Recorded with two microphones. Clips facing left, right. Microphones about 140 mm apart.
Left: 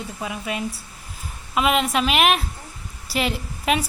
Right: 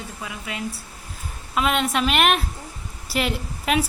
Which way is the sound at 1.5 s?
5° left (ahead or behind).